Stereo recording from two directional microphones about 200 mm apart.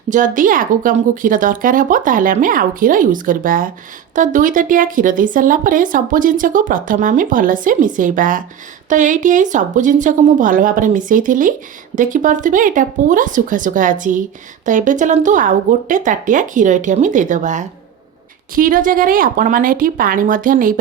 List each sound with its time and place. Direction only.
0.1 s a woman's voice: 40° right (ahead or behind)